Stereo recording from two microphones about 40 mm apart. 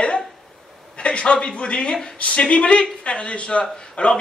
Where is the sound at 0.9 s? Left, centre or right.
Left.